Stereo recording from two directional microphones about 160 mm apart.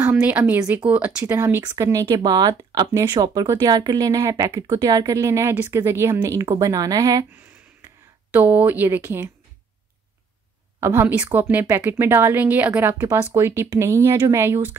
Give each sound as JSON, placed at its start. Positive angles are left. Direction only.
{"t": 0.0, "sound": "speech", "side_deg": -10}
{"t": 8.3, "sound": "speech", "side_deg": -10}
{"t": 10.8, "sound": "speech", "side_deg": -15}